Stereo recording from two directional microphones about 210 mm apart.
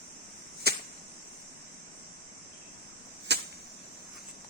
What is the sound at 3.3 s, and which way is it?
Cricket, 50° right (ahead or behind).